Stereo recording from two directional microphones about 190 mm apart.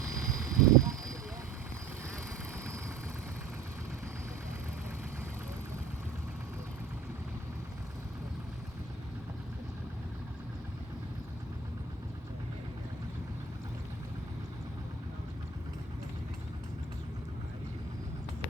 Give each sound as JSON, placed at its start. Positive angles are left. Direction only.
{"t": 0.0, "sound": "vehicle", "side_deg": -15}